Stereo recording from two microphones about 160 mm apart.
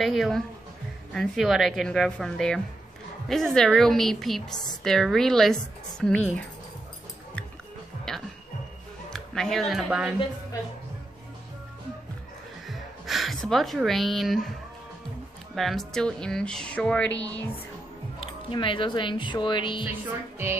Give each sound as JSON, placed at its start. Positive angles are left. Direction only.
{"t": 0.0, "sound": "a woman's voice", "side_deg": 0}
{"t": 8.1, "sound": "music", "side_deg": 5}
{"t": 9.1, "sound": "speech", "side_deg": 5}
{"t": 12.6, "sound": "speech", "side_deg": 0}
{"t": 15.5, "sound": "a woman's voice", "side_deg": 0}
{"t": 18.2, "sound": "speech", "side_deg": 30}
{"t": 19.8, "sound": "speech", "side_deg": -15}